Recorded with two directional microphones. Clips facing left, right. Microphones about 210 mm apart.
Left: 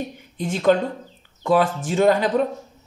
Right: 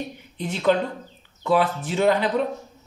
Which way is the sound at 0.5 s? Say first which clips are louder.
Left 3 dB; 45° left (ahead or behind).